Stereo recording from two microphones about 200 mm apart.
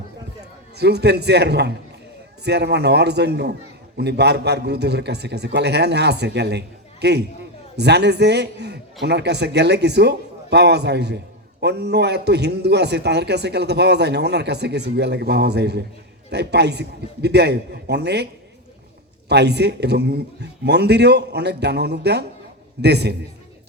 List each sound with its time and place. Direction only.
0.8 s a man's voice: 55° right (ahead or behind)
19.3 s a man's voice: 55° right (ahead or behind)